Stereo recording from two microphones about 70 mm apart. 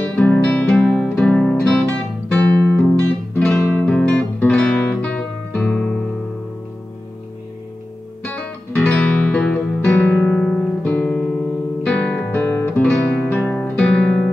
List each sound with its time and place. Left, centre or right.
0.0 s music: left
4.5 s guitar: centre
8.2 s music: centre
9.9 s music: left
10.4 s guitar: centre
12.8 s music: centre